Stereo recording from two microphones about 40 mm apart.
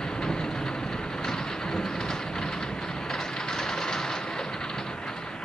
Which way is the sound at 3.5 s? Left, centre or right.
Centre.